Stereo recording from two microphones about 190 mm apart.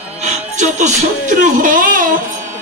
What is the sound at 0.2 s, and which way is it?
Music, 40° right (ahead or behind).